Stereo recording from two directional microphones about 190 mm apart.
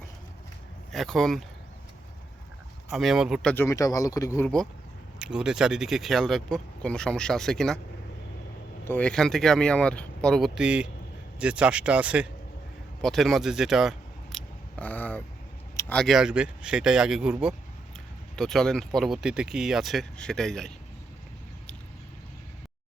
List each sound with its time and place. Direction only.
0.9 s speech: centre (ahead or behind)
2.9 s speech: centre (ahead or behind)
3.5 s speech: 15° left (ahead or behind)
5.2 s speech: 5° right (ahead or behind)
8.8 s speech: 10° left (ahead or behind)
14.3 s a sound: 10° left (ahead or behind)
16.0 s speech: centre (ahead or behind)